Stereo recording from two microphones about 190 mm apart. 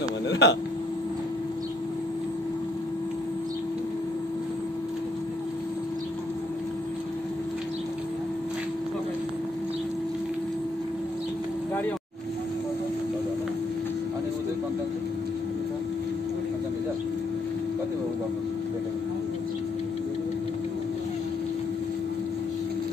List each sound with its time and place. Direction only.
0.3 s speech: 65° left (ahead or behind)